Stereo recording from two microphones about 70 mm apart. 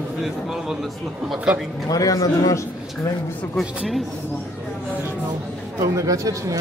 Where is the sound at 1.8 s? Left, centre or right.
Left.